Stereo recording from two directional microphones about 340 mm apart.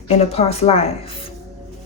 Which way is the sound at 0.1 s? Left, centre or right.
Centre.